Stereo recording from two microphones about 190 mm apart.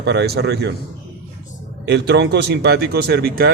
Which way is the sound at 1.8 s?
60° right (ahead or behind).